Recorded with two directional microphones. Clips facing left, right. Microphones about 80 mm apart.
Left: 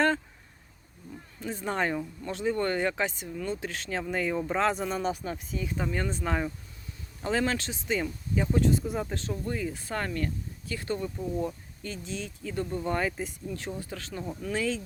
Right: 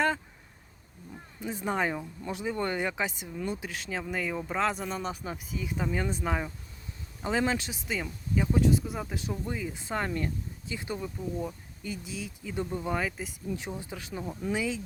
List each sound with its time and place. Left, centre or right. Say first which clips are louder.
1.4 s speech: even; centre
3.7 s speech: left 2 dB; centre
9.1 s speech: left 2 dB; centre
12.9 s speech: left 2 dB; centre
13.5 s speech: even; centre